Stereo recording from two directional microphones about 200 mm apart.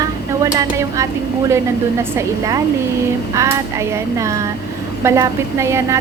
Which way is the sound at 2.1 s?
15° right (ahead or behind).